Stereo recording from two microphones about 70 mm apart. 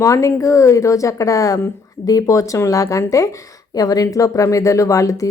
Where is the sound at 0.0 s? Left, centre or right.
Left.